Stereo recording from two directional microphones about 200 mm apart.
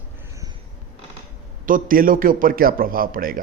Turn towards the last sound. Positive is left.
turn(degrees=-45)  # may be behind; listen again after turning